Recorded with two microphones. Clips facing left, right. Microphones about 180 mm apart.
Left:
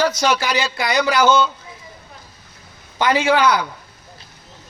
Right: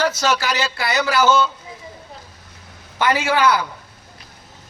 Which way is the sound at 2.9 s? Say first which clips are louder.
Left 2 dB; 15° left (ahead or behind).